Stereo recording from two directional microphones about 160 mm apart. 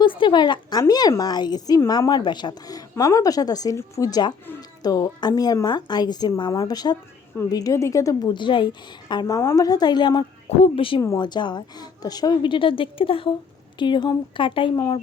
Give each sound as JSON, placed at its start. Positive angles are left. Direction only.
{"t": 0.0, "sound": "a woman's voice", "side_deg": 30}
{"t": 11.0, "sound": "a woman's voice", "side_deg": 25}